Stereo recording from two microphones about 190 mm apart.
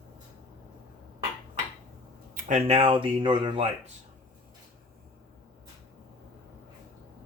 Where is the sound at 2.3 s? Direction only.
35° right (ahead or behind).